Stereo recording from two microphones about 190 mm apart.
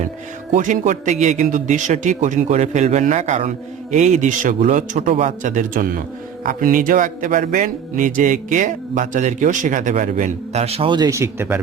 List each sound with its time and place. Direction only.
0.5 s speech: 40° right (ahead or behind); by 11.6 s 10° right (ahead or behind)